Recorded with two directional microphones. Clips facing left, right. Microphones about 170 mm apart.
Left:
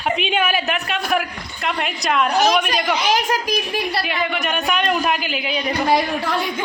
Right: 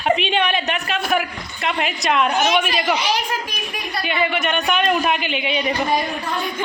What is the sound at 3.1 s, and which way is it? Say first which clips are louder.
Speech: left 4 dB; 45° left (ahead or behind).